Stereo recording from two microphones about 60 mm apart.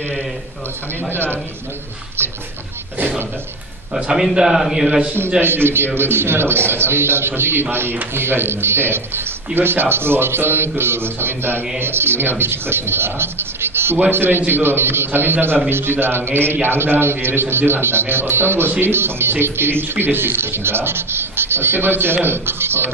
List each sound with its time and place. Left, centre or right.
1.1 s speech: right
3.0 s speech: right
3.9 s a man's voice: centre
5.4 s speech: right